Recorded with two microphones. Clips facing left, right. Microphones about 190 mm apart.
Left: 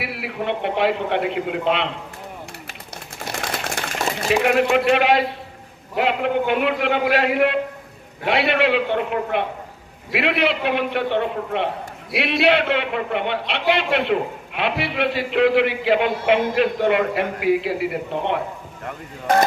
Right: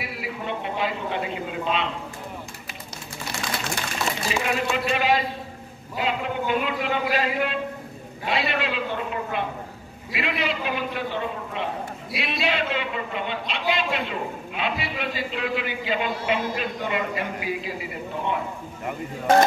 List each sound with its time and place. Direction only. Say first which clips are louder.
0.0 s a man's voice: left 5 dB; 70° left (ahead or behind)
3.2 s a sound: left 3 dB; 55° left (ahead or behind)
4.2 s a man's voice: left 11 dB; 60° left (ahead or behind)